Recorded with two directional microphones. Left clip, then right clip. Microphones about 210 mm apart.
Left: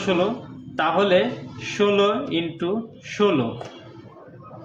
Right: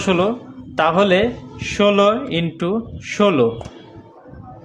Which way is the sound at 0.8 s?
50° right (ahead or behind).